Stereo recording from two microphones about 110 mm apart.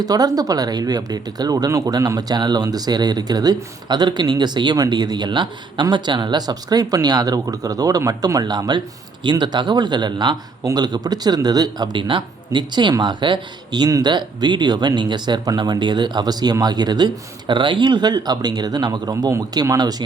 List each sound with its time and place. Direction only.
0.0 s a man's voice: 35° right (ahead or behind)